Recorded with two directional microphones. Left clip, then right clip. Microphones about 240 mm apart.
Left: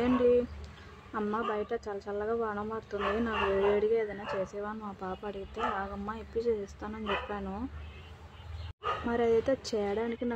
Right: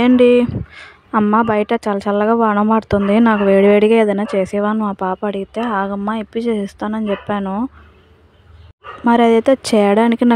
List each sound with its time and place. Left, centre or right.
0.0 s speech: right
9.0 s speech: right